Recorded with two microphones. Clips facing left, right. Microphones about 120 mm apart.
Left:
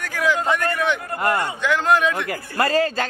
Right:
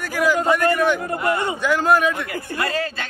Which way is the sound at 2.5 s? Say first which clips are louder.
Left 6 dB; 40° left (ahead or behind).